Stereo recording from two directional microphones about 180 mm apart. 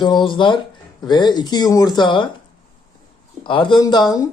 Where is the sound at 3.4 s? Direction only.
25° left (ahead or behind).